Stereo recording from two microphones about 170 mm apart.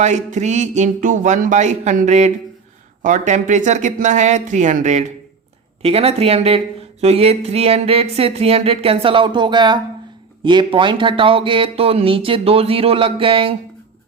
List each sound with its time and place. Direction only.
0.0 s speech: 45° right (ahead or behind)